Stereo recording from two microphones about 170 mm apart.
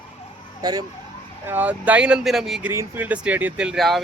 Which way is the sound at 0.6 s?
20° right (ahead or behind).